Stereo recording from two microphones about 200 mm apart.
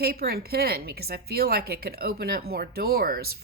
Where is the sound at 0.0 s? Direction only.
50° right (ahead or behind).